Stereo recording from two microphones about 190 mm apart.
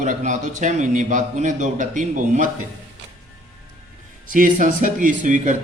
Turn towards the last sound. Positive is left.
turn(degrees=-40)  # may be behind; listen again after turning